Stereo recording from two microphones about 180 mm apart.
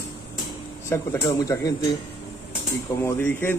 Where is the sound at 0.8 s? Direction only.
15° left (ahead or behind).